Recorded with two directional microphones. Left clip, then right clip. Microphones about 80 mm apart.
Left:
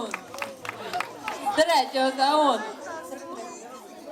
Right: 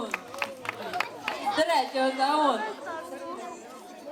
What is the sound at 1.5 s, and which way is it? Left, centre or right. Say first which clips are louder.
A woman's voice: left 4 dB; left.